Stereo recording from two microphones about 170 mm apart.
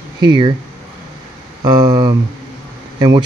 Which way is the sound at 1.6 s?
20° right (ahead or behind).